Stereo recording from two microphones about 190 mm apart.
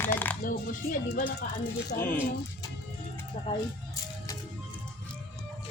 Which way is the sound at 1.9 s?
10° left (ahead or behind).